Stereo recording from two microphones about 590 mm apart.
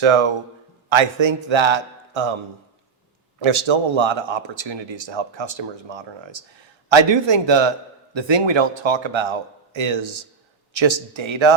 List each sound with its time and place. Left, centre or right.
0.0 s a man's voice: right
3.4 s speech: right